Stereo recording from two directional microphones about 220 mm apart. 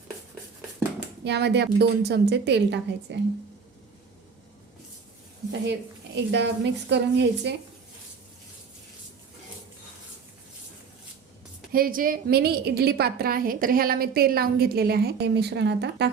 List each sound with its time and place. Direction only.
1.2 s a woman's voice: 50° right (ahead or behind)
6.1 s a woman's voice: 50° right (ahead or behind)
11.7 s a woman's voice: 40° right (ahead or behind)